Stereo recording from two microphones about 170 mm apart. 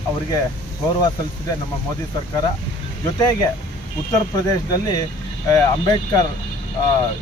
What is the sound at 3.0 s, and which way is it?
Speech, 25° left (ahead or behind).